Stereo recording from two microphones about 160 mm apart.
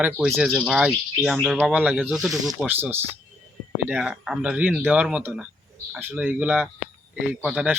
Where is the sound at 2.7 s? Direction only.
10° right (ahead or behind).